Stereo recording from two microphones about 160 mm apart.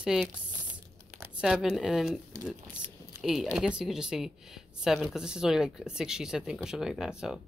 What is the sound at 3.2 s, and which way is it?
A woman's voice, centre (ahead or behind).